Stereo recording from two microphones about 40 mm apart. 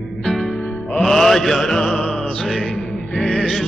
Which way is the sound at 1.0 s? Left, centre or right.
Centre.